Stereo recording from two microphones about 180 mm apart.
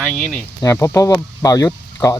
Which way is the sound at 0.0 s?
5° left (ahead or behind).